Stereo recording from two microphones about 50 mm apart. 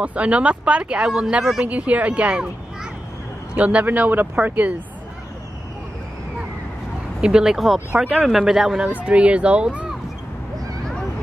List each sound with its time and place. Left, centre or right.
0.0 s speech: right
1.4 s speech: centre
1.7 s speech: right
3.8 s speech: right
7.2 s speech: centre
7.5 s speech: centre
9.0 s speech: right